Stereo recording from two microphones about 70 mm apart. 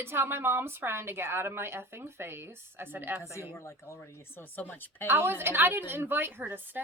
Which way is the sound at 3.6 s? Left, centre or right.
Left.